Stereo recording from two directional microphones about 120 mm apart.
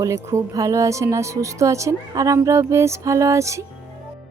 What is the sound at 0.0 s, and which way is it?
A woman's voice, 25° right (ahead or behind).